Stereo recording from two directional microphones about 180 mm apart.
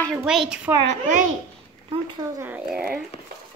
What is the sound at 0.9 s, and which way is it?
Speech, 45° right (ahead or behind).